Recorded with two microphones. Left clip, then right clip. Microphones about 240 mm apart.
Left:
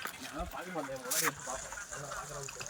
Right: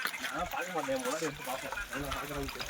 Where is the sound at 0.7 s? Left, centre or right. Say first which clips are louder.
Right 3 dB; right.